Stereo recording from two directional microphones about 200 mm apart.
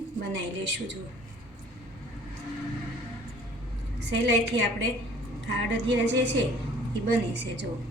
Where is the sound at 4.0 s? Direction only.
60° right (ahead or behind).